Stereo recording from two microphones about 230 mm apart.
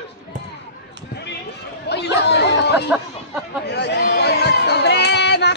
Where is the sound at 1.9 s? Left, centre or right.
Left.